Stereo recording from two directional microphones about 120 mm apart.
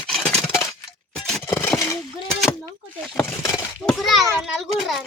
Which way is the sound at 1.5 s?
25° left (ahead or behind).